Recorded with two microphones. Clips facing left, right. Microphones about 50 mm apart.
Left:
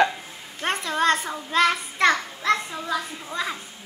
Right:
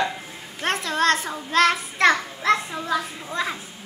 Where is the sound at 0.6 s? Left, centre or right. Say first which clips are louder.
Right 1 dB; centre.